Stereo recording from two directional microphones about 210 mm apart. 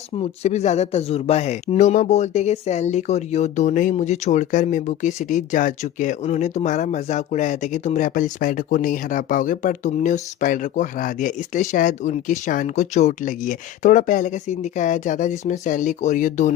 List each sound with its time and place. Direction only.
0.2 s speech: 30° left (ahead or behind)